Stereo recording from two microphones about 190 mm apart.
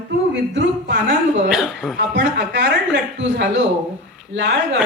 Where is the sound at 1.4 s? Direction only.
Centre (ahead or behind).